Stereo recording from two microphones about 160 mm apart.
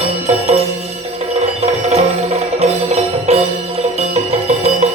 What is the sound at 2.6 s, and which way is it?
Music, 45° right (ahead or behind).